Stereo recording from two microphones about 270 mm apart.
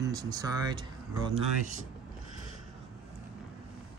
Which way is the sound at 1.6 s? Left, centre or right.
Right.